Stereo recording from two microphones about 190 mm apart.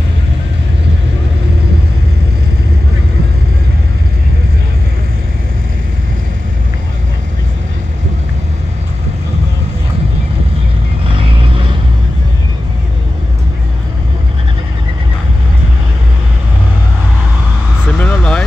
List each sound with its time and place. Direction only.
11.1 s vehicle: 30° right (ahead or behind)
17.9 s vehicle: 10° left (ahead or behind)